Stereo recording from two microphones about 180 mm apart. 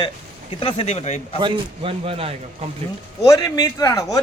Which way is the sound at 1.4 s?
30° right (ahead or behind).